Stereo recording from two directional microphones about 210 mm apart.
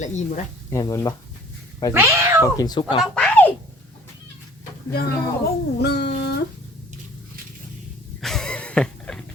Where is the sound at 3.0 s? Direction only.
5° left (ahead or behind).